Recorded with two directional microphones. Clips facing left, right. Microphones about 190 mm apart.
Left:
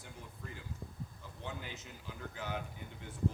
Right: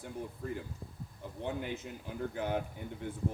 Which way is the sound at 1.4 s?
55° right (ahead or behind).